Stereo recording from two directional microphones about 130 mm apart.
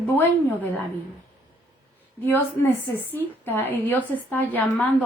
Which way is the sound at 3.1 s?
15° left (ahead or behind).